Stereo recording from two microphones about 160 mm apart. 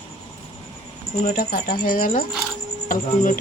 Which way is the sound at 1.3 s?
65° left (ahead or behind).